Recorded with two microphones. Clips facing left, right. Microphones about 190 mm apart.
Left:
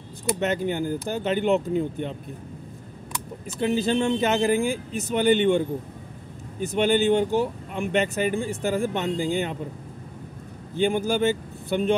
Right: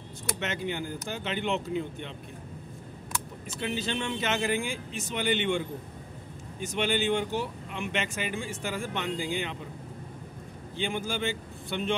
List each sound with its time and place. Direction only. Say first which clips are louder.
0.4 s speech: left 7 dB; 40° left (ahead or behind)
3.6 s speech: left 10 dB; 40° left (ahead or behind)
6.8 s speech: left 7 dB; 40° left (ahead or behind)
10.8 s speech: left 9 dB; 45° left (ahead or behind)